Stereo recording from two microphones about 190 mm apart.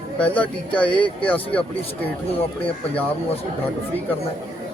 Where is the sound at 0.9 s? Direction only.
25° left (ahead or behind).